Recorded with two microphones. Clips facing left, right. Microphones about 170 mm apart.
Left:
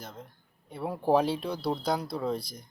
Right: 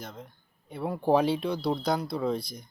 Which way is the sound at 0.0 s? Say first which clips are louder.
Right 2 dB; 5° left (ahead or behind).